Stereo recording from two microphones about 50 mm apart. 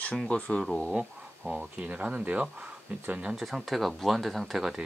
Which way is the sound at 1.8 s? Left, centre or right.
Right.